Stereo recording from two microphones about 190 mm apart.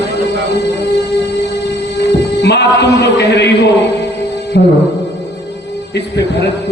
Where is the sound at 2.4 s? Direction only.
60° left (ahead or behind).